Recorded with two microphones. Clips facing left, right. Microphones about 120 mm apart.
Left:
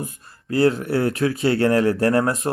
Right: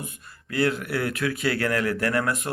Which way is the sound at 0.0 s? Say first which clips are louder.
Left 6 dB; 35° left (ahead or behind).